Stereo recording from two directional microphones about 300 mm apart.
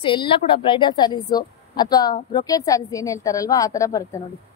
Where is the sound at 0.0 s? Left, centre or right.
Centre.